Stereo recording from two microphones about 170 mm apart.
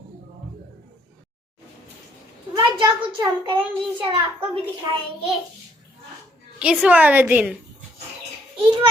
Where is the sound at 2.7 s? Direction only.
30° right (ahead or behind).